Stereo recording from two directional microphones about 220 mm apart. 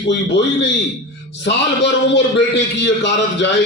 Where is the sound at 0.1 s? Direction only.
50° left (ahead or behind).